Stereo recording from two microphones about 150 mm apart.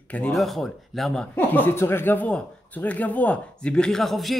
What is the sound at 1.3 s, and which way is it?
Speech, 10° left (ahead or behind).